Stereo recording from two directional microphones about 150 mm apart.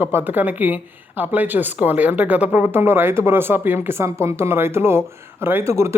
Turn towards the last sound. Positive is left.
turn(degrees=-20)  # may be behind; listen again after turning